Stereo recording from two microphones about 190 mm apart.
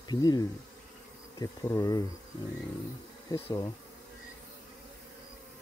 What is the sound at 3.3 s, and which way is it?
Speech, 20° left (ahead or behind).